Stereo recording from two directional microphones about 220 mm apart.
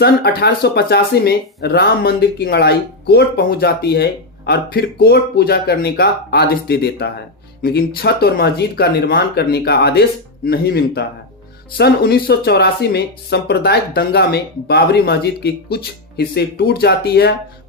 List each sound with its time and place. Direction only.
0.0 s speech: 45° left (ahead or behind)